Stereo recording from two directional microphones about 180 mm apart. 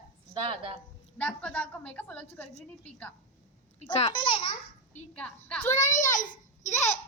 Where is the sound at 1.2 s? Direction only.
10° left (ahead or behind).